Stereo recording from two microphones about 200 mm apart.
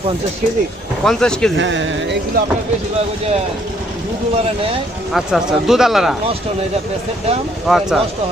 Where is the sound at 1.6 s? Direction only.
65° right (ahead or behind).